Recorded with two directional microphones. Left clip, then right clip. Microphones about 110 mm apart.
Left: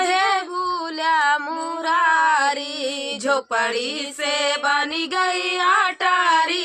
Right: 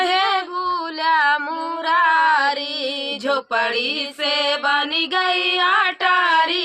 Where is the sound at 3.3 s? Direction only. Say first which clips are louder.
Even; 55° left (ahead or behind).